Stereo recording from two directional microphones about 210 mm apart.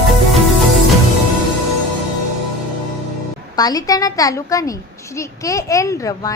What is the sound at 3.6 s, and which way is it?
A child's voice, 20° left (ahead or behind).